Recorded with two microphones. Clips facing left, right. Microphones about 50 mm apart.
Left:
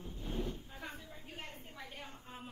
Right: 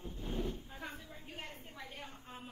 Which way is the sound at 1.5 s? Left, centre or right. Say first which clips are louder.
Even; right.